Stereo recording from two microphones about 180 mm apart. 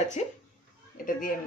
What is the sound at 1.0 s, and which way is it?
Speech, 50° left (ahead or behind).